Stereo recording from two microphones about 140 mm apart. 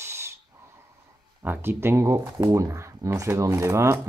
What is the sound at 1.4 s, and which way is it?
Speech, 15° right (ahead or behind).